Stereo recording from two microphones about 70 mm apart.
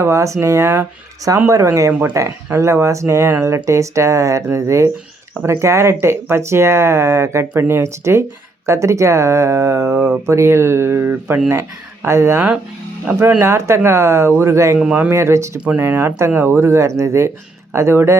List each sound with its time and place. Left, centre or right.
0.0 s speech: right
1.9 s speech: right
2.1 s speech: right
13.4 s speech: right